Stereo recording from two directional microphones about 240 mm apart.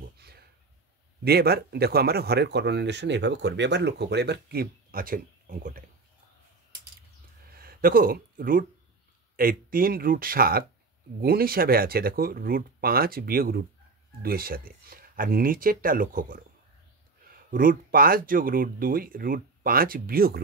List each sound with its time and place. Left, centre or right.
0.2 s a sound: right
1.2 s speech: right
7.5 s speech: right
17.5 s speech: right